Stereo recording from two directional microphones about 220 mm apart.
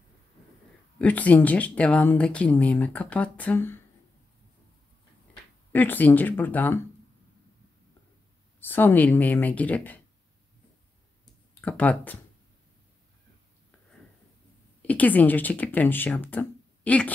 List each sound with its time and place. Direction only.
0.9 s speech: 5° left (ahead or behind)
5.3 s speech: 10° left (ahead or behind)
8.5 s speech: 10° left (ahead or behind)
11.6 s speech: 5° left (ahead or behind)
14.8 s speech: 5° left (ahead or behind)